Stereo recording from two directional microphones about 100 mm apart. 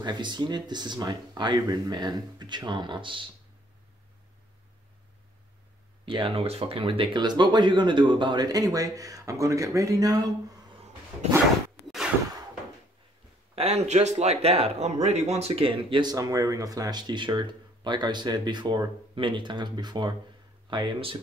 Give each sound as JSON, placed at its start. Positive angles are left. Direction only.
{"t": 0.0, "sound": "speech", "side_deg": -50}
{"t": 6.0, "sound": "speech", "side_deg": -60}
{"t": 6.4, "sound": "speech", "side_deg": -80}
{"t": 13.6, "sound": "speech", "side_deg": -90}
{"t": 16.1, "sound": "speech", "side_deg": -35}